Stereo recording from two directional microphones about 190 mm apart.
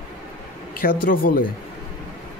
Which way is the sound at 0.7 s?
50° left (ahead or behind).